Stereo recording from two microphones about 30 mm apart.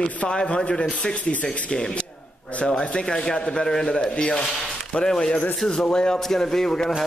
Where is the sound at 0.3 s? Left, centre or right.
Left.